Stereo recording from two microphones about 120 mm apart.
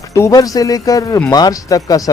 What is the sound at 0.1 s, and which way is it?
Speech, 30° left (ahead or behind).